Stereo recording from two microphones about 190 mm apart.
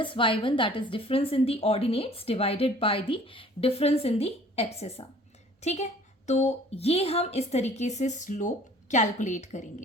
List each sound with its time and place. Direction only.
0.0 s a woman's voice: 25° left (ahead or behind)